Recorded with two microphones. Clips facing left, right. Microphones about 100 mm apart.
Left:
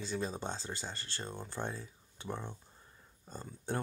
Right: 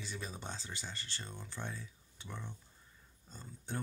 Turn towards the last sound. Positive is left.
turn(degrees=55)  # may be behind; listen again after turning